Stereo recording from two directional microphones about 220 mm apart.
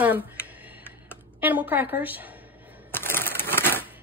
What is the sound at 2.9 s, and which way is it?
Crushing, 10° left (ahead or behind).